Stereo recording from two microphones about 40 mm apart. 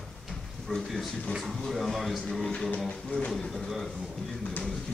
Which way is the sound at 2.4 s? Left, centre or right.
Centre.